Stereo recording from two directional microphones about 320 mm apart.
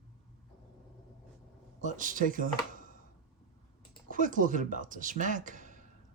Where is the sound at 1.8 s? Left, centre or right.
Right.